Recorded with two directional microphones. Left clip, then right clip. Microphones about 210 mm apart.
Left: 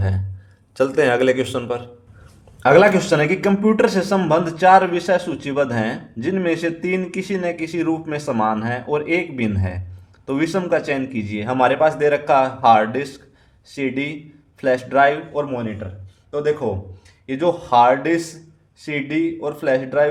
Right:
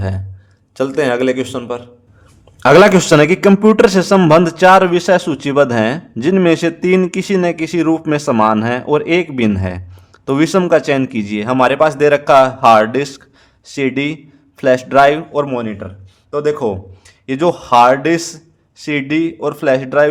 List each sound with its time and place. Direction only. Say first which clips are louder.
0.8 s a man's voice: right 1 dB; 15° right (ahead or behind)
2.6 s a man's voice: right 5 dB; 35° right (ahead or behind)